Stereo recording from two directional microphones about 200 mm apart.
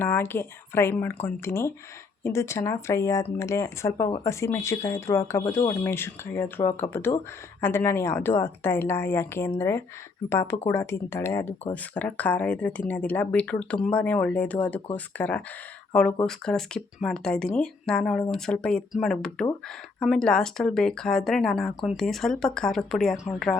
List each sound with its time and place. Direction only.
0.0 s speech: 10° left (ahead or behind)
23.1 s speech: 15° left (ahead or behind)